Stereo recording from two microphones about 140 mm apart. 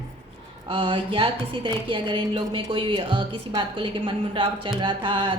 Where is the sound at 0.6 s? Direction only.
35° right (ahead or behind).